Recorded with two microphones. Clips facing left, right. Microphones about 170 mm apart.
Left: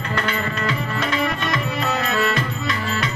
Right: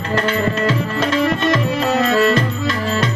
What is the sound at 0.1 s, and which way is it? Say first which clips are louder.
Speech: right 7 dB; 35° right (ahead or behind).